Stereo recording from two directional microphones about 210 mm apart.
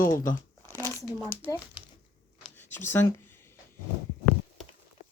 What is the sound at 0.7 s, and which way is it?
Crumpling, 10° left (ahead or behind).